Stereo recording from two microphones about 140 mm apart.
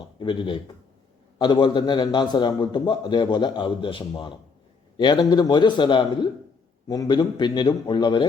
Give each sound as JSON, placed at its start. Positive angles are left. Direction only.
{"t": 0.2, "sound": "a man's voice", "side_deg": 35}